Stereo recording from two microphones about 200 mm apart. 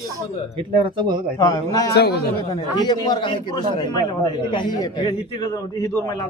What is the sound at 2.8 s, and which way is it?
A man's voice, 20° left (ahead or behind).